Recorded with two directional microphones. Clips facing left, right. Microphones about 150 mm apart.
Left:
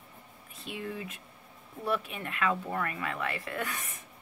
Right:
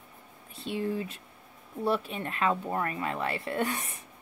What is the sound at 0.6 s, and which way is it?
A woman's voice, 30° right (ahead or behind).